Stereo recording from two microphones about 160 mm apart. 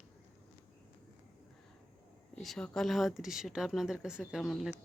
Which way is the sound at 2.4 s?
Centre (ahead or behind).